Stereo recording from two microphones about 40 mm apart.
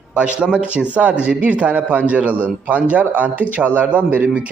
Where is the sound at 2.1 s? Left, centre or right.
Right.